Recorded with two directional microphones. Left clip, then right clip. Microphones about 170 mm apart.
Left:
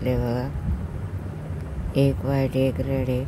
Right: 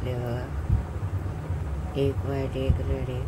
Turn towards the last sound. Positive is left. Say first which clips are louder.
# left 7 dB
turn(degrees=50)  # may be behind; listen again after turning